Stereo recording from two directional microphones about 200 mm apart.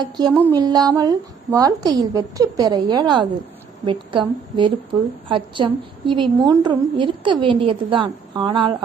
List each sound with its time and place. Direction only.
0.0 s a woman's voice: 20° right (ahead or behind)